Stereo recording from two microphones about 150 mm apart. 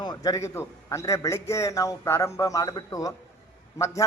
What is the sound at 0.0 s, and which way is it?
A man's voice, 25° left (ahead or behind).